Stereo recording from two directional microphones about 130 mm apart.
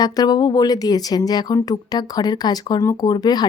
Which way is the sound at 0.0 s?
30° left (ahead or behind).